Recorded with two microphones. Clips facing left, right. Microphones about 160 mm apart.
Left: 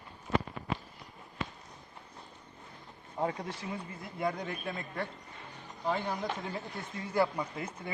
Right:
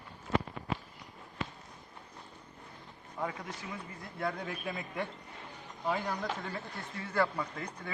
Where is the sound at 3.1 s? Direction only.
30° left (ahead or behind).